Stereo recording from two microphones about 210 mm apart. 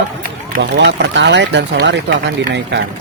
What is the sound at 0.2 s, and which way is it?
Speech, 50° right (ahead or behind).